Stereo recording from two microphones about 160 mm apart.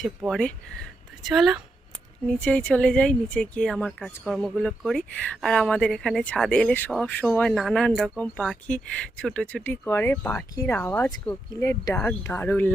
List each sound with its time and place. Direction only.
1.2 s a woman's voice: centre (ahead or behind)